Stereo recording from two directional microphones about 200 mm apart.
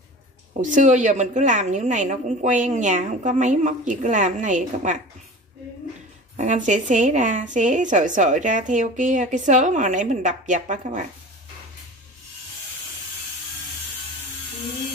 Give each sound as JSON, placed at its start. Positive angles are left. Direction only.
{"t": 0.6, "sound": "a woman's voice", "side_deg": -40}
{"t": 6.3, "sound": "a woman's voice", "side_deg": -35}